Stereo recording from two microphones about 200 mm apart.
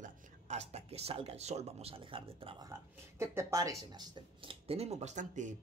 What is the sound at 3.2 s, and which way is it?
Speech, 15° right (ahead or behind).